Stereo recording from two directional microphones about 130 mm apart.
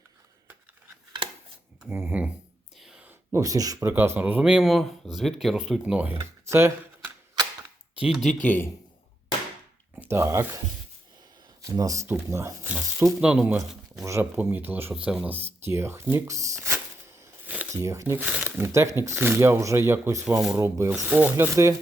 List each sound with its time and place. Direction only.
1.8 s speech: 15° right (ahead or behind)
2.7 s a sound: 5° right (ahead or behind)
3.1 s speech: 25° right (ahead or behind)
6.5 s camera: 20° right (ahead or behind)
8.0 s speech: 5° right (ahead or behind)
8.3 s a man's voice: 10° left (ahead or behind)
9.9 s a sound: 15° right (ahead or behind)
11.6 s speech: 25° right (ahead or behind)
20.3 s speech: 5° right (ahead or behind)
20.6 s speech: 20° right (ahead or behind)
20.9 s speech: 5° right (ahead or behind); by 21.8 s 25° right (ahead or behind)